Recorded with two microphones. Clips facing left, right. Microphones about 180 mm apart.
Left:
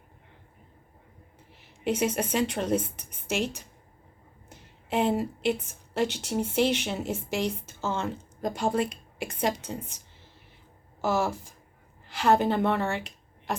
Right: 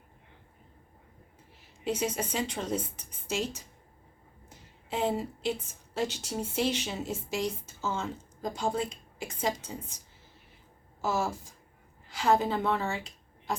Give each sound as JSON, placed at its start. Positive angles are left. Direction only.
{"t": 1.8, "sound": "a woman's voice", "side_deg": 65}
{"t": 11.0, "sound": "speech", "side_deg": 70}